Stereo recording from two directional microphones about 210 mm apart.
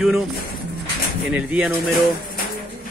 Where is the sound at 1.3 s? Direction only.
5° right (ahead or behind).